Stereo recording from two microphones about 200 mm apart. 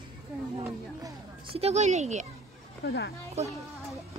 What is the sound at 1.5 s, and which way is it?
Speech, 30° right (ahead or behind).